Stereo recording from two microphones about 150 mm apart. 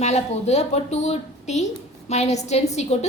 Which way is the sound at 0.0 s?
50° left (ahead or behind).